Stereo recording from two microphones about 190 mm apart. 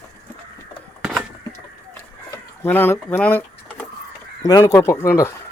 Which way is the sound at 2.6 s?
10° left (ahead or behind).